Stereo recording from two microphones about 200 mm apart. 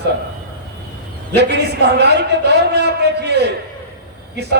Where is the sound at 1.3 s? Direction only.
55° right (ahead or behind).